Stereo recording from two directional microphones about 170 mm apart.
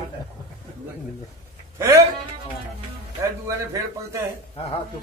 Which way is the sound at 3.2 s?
15° right (ahead or behind).